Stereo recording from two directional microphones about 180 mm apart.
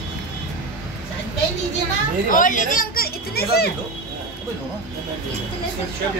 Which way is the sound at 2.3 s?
45° left (ahead or behind).